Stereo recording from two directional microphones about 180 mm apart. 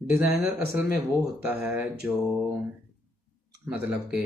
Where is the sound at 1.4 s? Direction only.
10° right (ahead or behind).